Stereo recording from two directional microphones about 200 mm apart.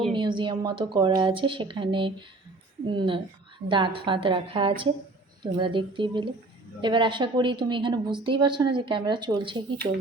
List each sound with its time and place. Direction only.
0.1 s a woman's voice: 25° right (ahead or behind)